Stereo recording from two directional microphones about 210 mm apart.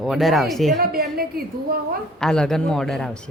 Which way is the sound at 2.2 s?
5° left (ahead or behind).